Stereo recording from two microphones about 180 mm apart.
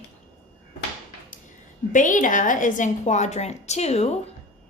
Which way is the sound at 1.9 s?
45° left (ahead or behind).